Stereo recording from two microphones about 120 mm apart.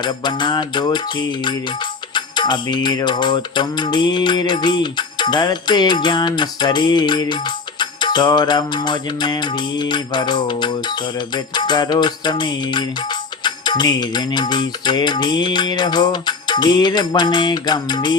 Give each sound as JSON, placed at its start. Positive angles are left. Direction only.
{"t": 0.0, "sound": "music", "side_deg": 40}